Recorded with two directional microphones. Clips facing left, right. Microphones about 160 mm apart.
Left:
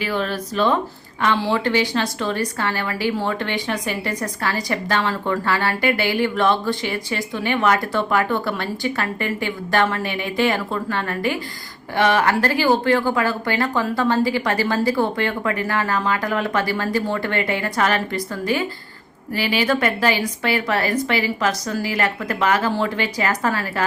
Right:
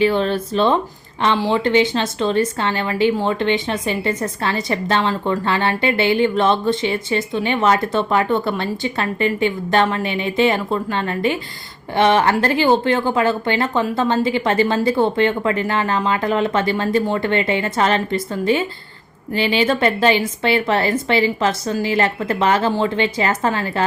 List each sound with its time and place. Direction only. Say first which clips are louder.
0.0 s a woman's voice: right 7 dB; 25° right (ahead or behind)